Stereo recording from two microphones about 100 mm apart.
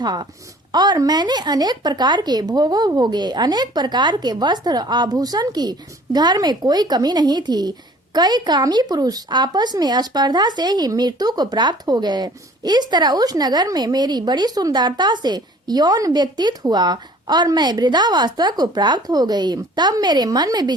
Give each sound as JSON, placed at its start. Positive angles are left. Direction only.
{"t": 0.0, "sound": "speech", "side_deg": -45}